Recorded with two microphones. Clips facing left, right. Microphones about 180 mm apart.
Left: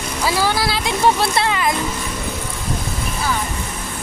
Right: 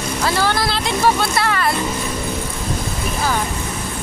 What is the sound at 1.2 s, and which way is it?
Speech, 20° left (ahead or behind).